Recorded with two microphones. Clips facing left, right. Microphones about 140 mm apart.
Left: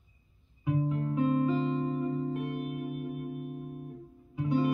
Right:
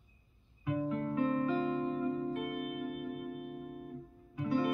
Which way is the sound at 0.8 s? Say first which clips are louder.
Left 3 dB; 20° left (ahead or behind).